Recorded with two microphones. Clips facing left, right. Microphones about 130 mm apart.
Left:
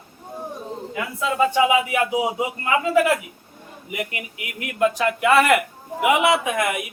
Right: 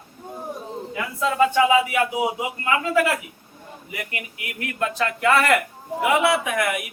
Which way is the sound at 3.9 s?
20° left (ahead or behind).